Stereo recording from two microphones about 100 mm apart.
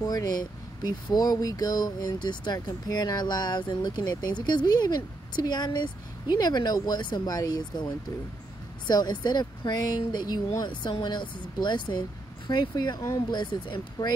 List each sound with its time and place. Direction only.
0.0 s speech: 40° left (ahead or behind)